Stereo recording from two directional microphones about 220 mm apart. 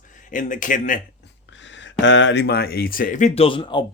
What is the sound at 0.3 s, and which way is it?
Speech, 35° left (ahead or behind).